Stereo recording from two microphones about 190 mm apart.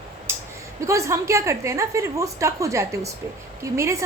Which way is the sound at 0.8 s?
15° right (ahead or behind).